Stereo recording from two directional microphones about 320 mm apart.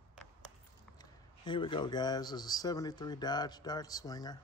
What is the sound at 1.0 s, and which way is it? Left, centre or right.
A man's voice, centre.